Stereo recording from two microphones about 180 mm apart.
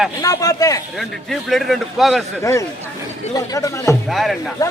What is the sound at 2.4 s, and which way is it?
Speech, 15° left (ahead or behind).